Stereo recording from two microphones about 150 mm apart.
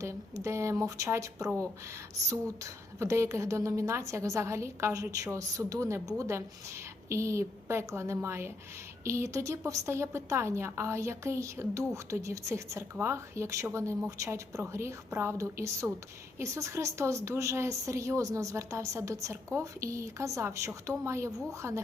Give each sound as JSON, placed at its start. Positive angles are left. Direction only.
{"t": 0.0, "sound": "a woman's voice", "side_deg": -20}